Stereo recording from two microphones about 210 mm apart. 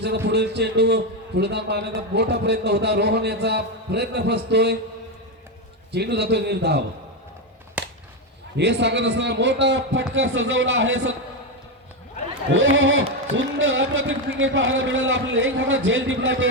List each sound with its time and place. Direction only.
0.3 s a man's voice: 55° right (ahead or behind)
5.9 s a man's voice: 50° right (ahead or behind)
7.8 s a sound: 5° right (ahead or behind)
8.5 s speech: 55° right (ahead or behind)
12.7 s speech: 60° right (ahead or behind)